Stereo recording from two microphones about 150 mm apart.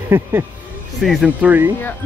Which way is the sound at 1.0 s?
5° right (ahead or behind).